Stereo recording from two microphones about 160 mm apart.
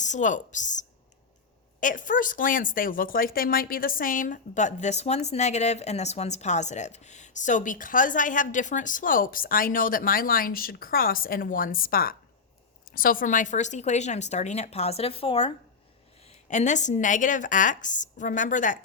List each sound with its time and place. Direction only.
0.0 s a woman's voice: 50° left (ahead or behind); by 15.5 s 35° left (ahead or behind)
16.2 s a woman's voice: 50° left (ahead or behind)